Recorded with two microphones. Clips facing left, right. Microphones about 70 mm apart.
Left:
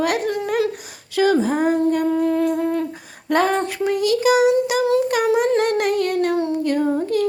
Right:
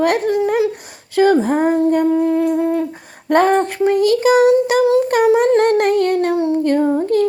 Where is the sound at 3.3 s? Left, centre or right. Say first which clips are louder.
Right 5 dB; right.